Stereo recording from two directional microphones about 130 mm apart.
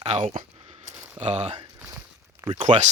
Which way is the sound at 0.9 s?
55° right (ahead or behind).